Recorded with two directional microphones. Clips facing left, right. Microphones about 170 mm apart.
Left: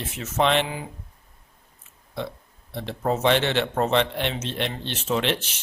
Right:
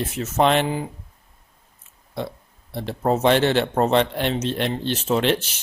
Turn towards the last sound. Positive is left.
turn(degrees=-40)  # may be behind; listen again after turning